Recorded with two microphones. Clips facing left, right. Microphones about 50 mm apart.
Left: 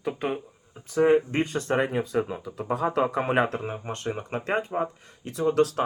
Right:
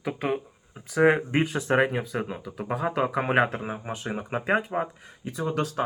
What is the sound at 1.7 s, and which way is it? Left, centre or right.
Speech, right.